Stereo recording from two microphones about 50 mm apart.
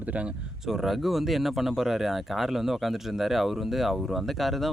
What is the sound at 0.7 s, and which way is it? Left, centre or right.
Speech, centre.